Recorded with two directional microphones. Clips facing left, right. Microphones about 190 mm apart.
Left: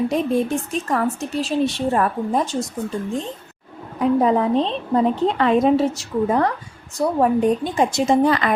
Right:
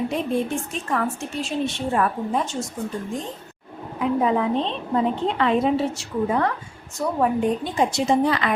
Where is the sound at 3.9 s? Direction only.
40° left (ahead or behind).